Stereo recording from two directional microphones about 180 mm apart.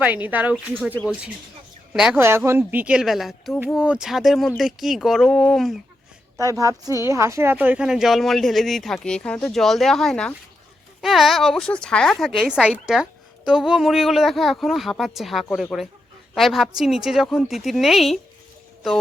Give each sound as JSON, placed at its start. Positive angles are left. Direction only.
{"t": 0.0, "sound": "speech", "side_deg": -10}
{"t": 0.5, "sound": "a woman's voice", "side_deg": 5}
{"t": 1.9, "sound": "a woman's voice", "side_deg": -5}
{"t": 6.4, "sound": "a woman's voice", "side_deg": -15}